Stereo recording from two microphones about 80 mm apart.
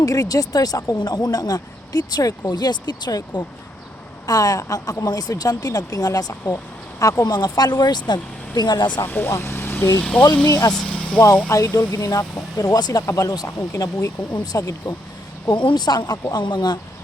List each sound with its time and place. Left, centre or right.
0.0 s speech: left
7.3 s speech: left
9.0 s speech: left
10.0 s speech: centre
10.7 s vehicle: centre
11.4 s speech: left
15.4 s speech: left